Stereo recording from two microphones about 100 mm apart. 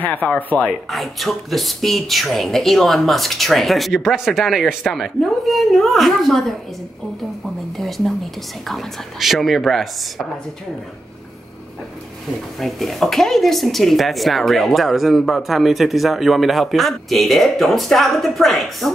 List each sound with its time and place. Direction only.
0.0 s speech: 15° left (ahead or behind)
0.8 s speech: centre (ahead or behind)
7.7 s a sound: centre (ahead or behind)
8.6 s speech: centre (ahead or behind)
12.5 s speech: centre (ahead or behind)